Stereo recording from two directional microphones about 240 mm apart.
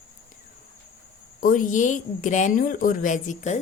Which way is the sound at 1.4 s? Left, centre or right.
Left.